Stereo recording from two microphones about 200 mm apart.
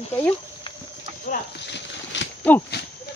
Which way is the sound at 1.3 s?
60° left (ahead or behind).